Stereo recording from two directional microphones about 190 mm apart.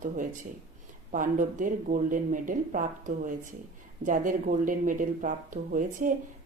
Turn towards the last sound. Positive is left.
turn(degrees=-45)  # may be behind; listen again after turning